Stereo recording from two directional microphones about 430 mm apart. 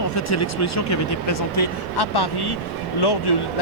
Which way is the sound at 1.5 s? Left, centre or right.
Left.